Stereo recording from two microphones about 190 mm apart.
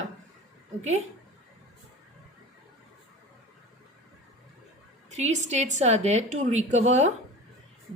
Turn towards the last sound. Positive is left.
turn(degrees=-40)  # may be behind; listen again after turning